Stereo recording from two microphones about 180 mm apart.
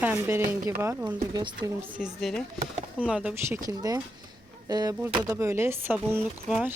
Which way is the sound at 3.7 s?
20° right (ahead or behind).